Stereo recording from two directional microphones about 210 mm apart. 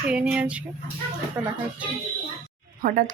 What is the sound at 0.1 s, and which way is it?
Speech, 5° right (ahead or behind).